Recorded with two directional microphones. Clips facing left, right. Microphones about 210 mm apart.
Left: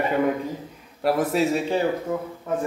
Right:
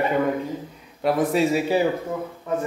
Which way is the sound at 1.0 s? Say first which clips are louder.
Right 1 dB; centre (ahead or behind).